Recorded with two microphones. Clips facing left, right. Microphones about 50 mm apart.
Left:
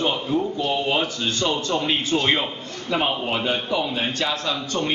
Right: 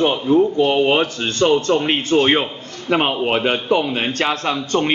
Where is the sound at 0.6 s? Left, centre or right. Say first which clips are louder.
Right 7 dB; right.